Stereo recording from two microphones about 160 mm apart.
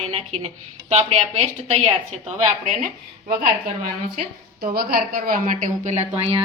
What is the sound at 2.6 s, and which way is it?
Speech, 55° right (ahead or behind).